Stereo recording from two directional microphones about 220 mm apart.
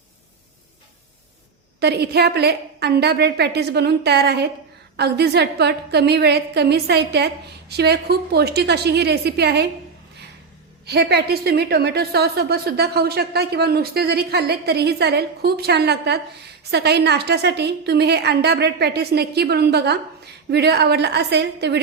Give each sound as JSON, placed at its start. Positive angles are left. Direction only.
{"t": 1.8, "sound": "a woman's voice", "side_deg": -50}
{"t": 10.8, "sound": "a woman's voice", "side_deg": -50}